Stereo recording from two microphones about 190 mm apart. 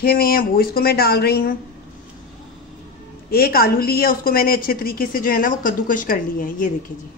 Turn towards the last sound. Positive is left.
turn(degrees=45)  # may be behind; listen again after turning